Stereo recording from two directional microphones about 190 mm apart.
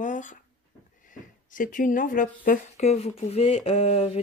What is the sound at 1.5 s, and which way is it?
Speech, 45° left (ahead or behind).